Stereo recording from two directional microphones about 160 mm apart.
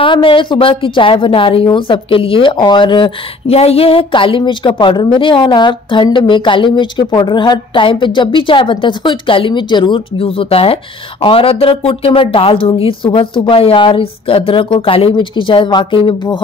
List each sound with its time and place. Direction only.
0.0 s a woman's voice: 35° left (ahead or behind)